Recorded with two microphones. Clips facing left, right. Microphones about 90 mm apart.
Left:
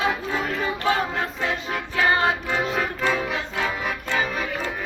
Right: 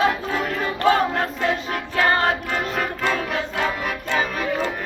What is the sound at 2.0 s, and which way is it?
Music, 10° left (ahead or behind).